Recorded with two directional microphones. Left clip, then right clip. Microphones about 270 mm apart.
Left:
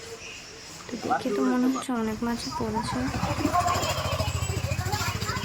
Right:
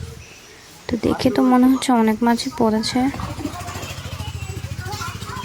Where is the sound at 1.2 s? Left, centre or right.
Right.